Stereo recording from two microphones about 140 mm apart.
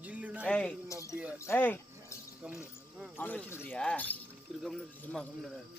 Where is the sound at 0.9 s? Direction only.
20° left (ahead or behind).